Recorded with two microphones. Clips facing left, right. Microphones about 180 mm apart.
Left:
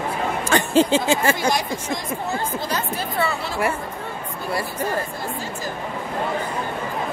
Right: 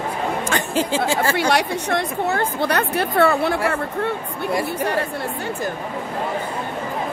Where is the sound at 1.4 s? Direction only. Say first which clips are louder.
Right 3 dB; 70° right (ahead or behind).